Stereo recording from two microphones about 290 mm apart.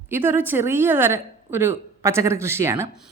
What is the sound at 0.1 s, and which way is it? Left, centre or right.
A woman's voice, centre.